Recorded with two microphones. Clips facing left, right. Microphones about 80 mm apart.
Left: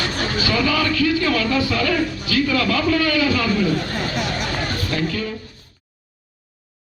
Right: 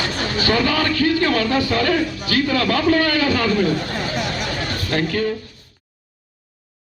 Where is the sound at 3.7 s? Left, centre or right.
Centre.